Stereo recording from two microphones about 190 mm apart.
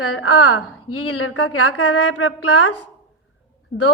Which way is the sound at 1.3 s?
75° left (ahead or behind).